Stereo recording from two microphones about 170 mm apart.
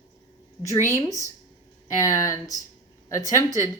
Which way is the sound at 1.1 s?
20° right (ahead or behind).